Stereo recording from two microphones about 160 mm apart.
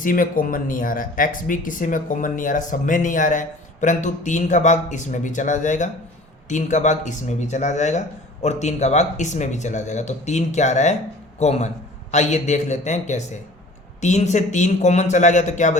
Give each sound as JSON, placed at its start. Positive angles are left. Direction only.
{"t": 0.0, "sound": "speech", "side_deg": 60}